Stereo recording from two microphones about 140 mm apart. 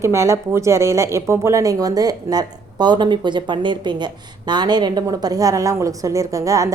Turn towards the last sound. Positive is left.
turn(degrees=-25)  # may be behind; listen again after turning